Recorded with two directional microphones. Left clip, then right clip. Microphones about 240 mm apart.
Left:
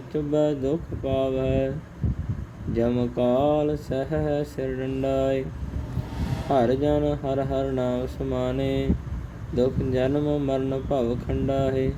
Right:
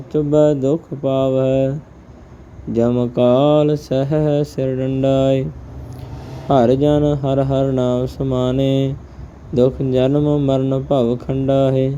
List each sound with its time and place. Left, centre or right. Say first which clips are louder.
0.1 s speech: right 9 dB; right
2.7 s speech: right 8 dB; right
6.5 s speech: right 8 dB; right